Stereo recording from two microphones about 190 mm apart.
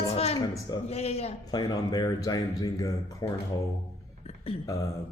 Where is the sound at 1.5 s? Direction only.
20° left (ahead or behind).